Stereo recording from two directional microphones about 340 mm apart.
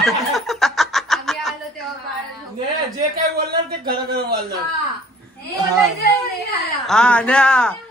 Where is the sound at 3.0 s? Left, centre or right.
Right.